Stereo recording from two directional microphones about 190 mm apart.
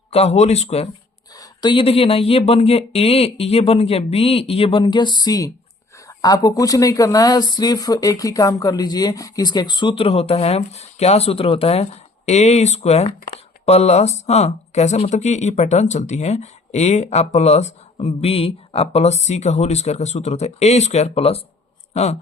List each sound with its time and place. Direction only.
0.1 s speech: 35° left (ahead or behind)
1.3 s speech: 20° left (ahead or behind)